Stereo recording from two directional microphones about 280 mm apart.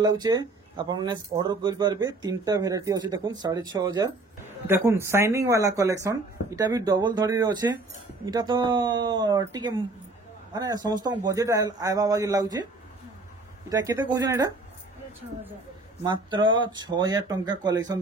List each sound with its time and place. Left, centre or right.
0.0 s speech: centre
13.7 s speech: centre
16.0 s speech: centre